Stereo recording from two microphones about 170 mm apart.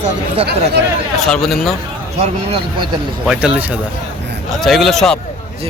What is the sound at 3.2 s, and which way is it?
Speech, 5° right (ahead or behind).